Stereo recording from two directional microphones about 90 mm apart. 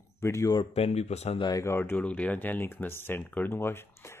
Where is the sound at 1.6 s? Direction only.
25° left (ahead or behind).